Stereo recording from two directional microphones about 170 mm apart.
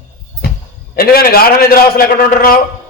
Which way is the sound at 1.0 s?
60° left (ahead or behind).